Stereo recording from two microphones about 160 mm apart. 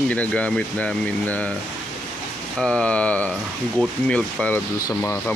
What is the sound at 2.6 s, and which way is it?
Speech, 5° left (ahead or behind).